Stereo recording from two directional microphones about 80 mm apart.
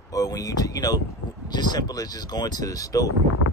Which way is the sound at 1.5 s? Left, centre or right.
Left.